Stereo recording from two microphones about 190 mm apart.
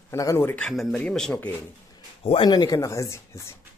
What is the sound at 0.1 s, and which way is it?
Speech, 15° left (ahead or behind).